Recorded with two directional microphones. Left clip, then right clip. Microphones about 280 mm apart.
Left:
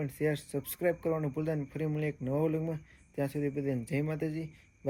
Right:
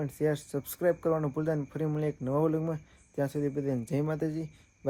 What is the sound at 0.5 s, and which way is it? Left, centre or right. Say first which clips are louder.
Speech: right 3 dB; right.